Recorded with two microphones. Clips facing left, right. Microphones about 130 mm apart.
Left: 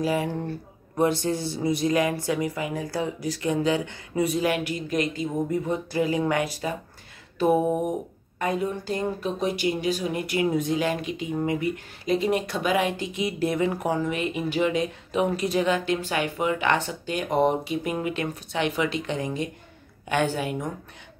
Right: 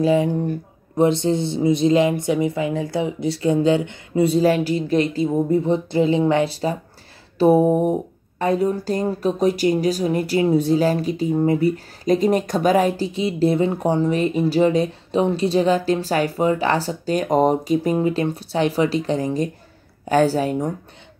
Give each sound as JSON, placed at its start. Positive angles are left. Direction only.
{"t": 0.0, "sound": "speech", "side_deg": -25}